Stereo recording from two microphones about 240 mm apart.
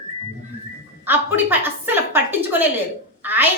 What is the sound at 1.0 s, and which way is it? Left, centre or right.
A woman's voice, centre.